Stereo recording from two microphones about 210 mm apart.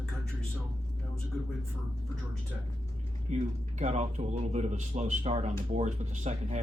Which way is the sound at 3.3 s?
35° right (ahead or behind).